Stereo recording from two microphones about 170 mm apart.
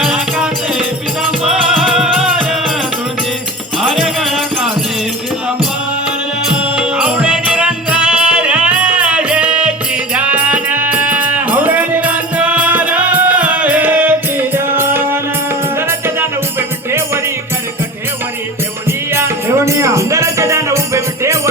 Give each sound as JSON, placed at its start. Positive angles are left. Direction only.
{"t": 0.0, "sound": "music", "side_deg": -5}
{"t": 3.8, "sound": "music", "side_deg": 0}
{"t": 6.1, "sound": "music", "side_deg": -5}
{"t": 18.9, "sound": "music", "side_deg": -15}